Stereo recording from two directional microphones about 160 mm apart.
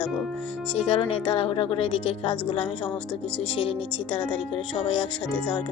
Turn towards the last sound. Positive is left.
turn(degrees=30)  # may be behind; listen again after turning